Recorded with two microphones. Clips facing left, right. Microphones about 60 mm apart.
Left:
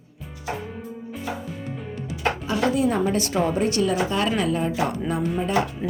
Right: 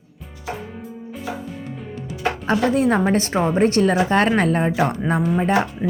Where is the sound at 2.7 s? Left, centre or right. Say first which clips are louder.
Right 3 dB; right.